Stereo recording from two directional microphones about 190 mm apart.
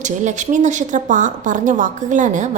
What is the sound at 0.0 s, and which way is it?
A woman's voice, 40° right (ahead or behind).